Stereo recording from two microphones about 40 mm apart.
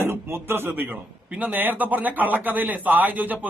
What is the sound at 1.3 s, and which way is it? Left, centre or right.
A man's voice, right.